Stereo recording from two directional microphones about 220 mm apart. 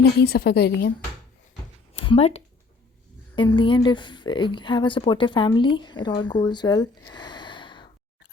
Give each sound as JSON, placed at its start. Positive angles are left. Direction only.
{"t": 0.0, "sound": "a woman's voice", "side_deg": 45}
{"t": 1.9, "sound": "a sound", "side_deg": 25}
{"t": 3.3, "sound": "speech", "side_deg": 20}
{"t": 7.1, "sound": "gasp", "side_deg": 20}